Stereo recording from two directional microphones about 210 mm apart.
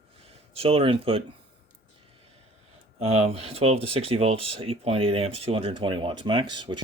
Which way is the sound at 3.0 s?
30° right (ahead or behind).